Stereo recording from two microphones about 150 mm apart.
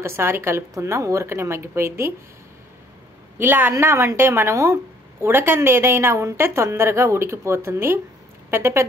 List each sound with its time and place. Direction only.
0.0 s a woman's voice: 15° right (ahead or behind)
3.3 s a woman's voice: 15° right (ahead or behind)